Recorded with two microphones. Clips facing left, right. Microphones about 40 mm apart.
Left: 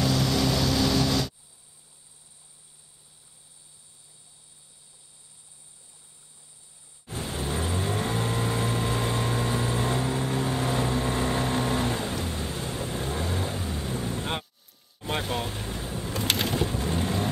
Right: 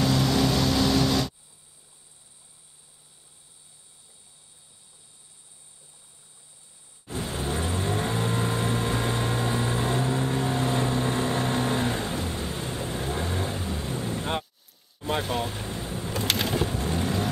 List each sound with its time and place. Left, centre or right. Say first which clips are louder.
0.0 s vehicle: right 2 dB; right
7.2 s vehicle: even; centre
13.6 s vehicle: even; centre